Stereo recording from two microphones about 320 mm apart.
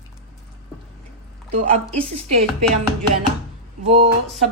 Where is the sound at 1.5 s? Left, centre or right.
Right.